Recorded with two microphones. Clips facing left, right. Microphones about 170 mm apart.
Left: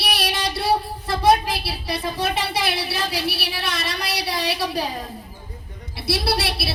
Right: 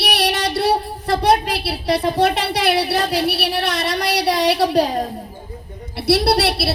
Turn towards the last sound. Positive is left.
turn(degrees=-70)  # may be behind; listen again after turning